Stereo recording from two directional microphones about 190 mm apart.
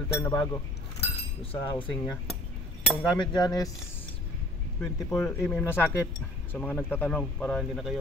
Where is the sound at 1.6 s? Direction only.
20° left (ahead or behind).